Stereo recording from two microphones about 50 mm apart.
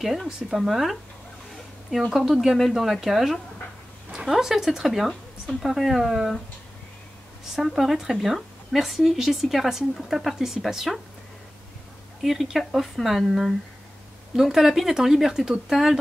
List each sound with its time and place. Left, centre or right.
0.5 s a woman's voice: centre
2.1 s a woman's voice: centre
7.5 s a woman's voice: centre
12.2 s a woman's voice: centre